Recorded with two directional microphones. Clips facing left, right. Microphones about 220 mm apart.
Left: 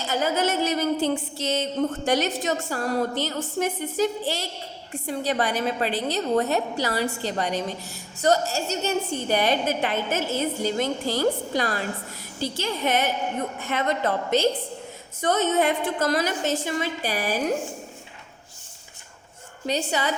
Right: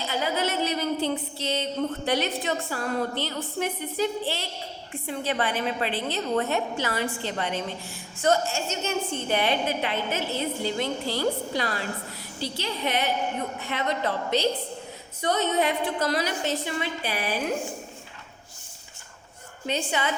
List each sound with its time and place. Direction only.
0.0 s a woman's voice: 45° left (ahead or behind)
19.6 s a woman's voice: 40° left (ahead or behind)